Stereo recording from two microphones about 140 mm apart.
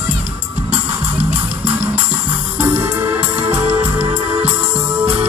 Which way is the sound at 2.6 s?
15° right (ahead or behind).